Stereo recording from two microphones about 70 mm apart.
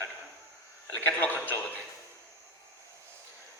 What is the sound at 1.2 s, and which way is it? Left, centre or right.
Speech, left.